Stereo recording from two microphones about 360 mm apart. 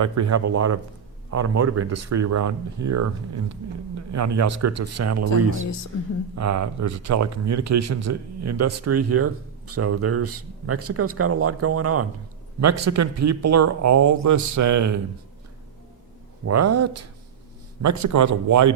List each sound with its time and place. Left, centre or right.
0.0 s speech: right
16.5 s speech: right